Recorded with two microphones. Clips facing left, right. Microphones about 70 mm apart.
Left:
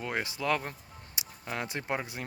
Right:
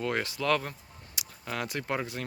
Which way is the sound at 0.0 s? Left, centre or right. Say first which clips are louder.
Right 3 dB; centre.